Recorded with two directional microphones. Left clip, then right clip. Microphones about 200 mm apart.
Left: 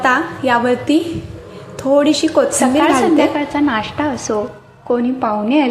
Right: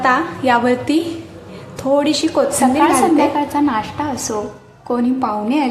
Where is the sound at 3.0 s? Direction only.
Centre (ahead or behind).